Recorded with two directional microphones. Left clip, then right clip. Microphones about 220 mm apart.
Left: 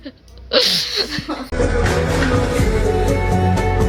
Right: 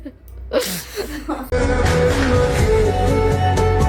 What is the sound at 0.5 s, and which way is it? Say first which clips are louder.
Music: left 6 dB; 10° right (ahead or behind).